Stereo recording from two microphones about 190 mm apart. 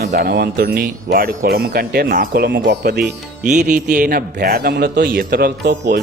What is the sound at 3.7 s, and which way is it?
Speech, 45° right (ahead or behind).